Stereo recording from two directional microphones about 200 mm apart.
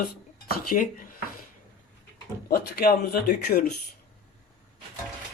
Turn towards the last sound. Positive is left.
turn(degrees=50)  # may be behind; listen again after turning